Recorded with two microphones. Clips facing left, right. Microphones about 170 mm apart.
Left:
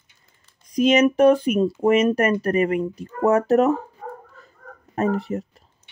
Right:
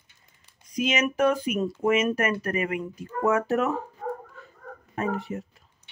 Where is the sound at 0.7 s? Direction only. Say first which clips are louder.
Left 9 dB; 35° left (ahead or behind).